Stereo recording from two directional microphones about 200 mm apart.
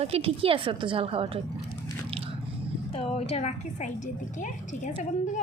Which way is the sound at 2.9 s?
30° left (ahead or behind).